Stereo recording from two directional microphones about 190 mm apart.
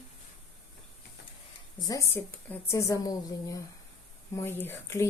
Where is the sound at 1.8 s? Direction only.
15° left (ahead or behind).